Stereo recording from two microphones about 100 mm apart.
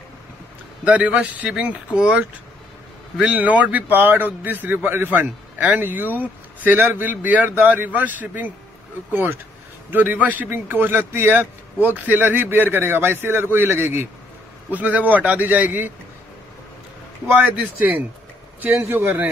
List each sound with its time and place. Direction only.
0.8 s a man's voice: 10° right (ahead or behind)
17.3 s a man's voice: 15° right (ahead or behind)